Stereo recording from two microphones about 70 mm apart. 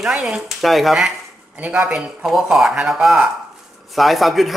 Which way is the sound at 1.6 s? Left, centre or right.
Right.